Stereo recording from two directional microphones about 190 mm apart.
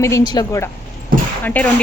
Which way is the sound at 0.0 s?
15° left (ahead or behind).